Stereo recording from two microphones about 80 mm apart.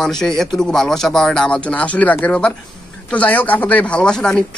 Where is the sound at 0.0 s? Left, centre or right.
Centre.